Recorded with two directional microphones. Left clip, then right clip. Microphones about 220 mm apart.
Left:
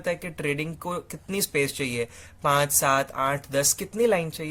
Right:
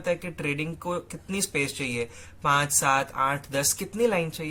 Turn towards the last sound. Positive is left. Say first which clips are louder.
# left 2 dB
turn(degrees=45)  # may be behind; listen again after turning